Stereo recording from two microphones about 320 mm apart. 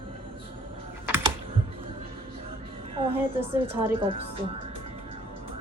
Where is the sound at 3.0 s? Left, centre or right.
Centre.